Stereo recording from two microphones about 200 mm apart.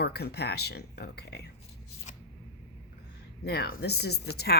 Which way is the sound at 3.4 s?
55° left (ahead or behind).